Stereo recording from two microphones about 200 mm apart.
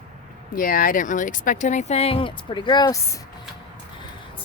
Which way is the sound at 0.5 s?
45° left (ahead or behind).